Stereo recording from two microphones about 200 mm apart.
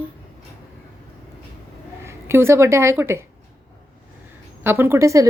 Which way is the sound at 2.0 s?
10° right (ahead or behind).